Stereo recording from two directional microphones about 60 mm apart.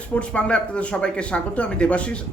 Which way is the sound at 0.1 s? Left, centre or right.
Centre.